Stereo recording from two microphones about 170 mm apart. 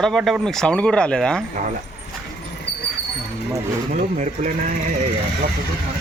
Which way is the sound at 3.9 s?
50° right (ahead or behind).